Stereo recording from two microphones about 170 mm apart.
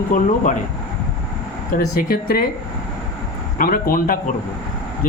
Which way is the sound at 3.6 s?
60° left (ahead or behind).